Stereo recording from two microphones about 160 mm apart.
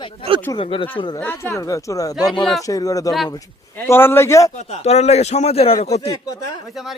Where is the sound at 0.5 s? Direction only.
35° left (ahead or behind).